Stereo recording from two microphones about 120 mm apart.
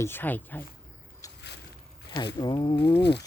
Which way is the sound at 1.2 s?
30° left (ahead or behind).